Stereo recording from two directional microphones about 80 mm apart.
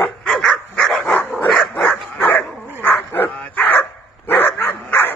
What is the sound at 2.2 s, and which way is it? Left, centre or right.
Dog, left.